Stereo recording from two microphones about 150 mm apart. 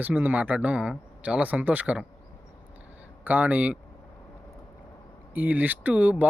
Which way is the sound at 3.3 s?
10° right (ahead or behind).